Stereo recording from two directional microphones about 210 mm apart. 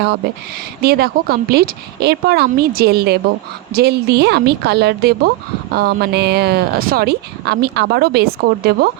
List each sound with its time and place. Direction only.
0.8 s speech: 50° right (ahead or behind)